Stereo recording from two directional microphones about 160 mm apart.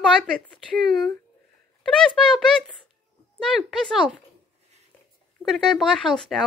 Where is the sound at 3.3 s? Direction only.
Centre (ahead or behind).